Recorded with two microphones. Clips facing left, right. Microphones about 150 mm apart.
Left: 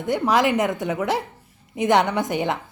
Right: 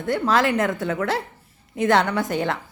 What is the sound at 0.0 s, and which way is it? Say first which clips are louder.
A woman's voice: left 1 dB; 15° left (ahead or behind).